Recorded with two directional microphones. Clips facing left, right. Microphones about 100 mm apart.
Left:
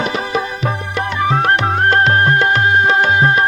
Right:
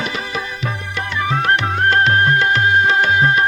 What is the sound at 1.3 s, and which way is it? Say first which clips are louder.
Music: left 2 dB; 35° left (ahead or behind).